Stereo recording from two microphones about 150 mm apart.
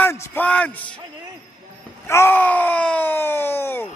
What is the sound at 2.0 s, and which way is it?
Groan, 15° left (ahead or behind).